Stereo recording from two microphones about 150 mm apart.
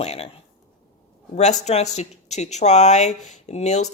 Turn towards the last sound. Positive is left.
turn(degrees=50)  # may be behind; listen again after turning